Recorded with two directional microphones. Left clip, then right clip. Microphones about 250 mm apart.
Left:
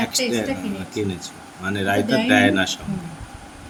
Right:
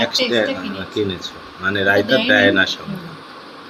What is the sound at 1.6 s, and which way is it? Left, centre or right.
Speech, left.